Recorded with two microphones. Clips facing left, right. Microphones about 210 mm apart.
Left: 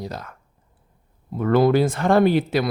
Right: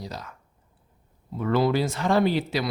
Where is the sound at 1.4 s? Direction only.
50° left (ahead or behind).